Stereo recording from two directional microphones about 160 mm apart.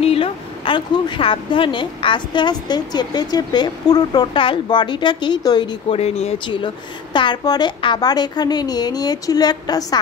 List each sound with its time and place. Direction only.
0.0 s a woman's voice: 35° left (ahead or behind)
5.9 s a woman's voice: 40° left (ahead or behind); by 9.9 s 25° left (ahead or behind)